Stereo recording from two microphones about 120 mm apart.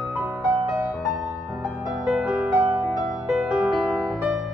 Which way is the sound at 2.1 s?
5° right (ahead or behind).